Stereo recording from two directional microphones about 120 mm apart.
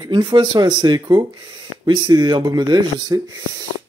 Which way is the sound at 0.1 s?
40° right (ahead or behind).